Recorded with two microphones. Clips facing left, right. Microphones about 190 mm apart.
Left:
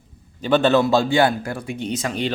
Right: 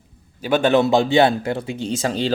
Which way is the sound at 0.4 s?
10° right (ahead or behind).